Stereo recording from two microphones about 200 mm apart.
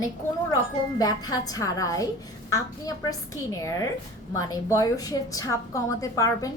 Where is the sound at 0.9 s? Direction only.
20° left (ahead or behind).